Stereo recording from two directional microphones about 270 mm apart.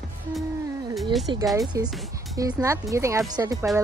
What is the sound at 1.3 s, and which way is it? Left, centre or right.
Speech, centre.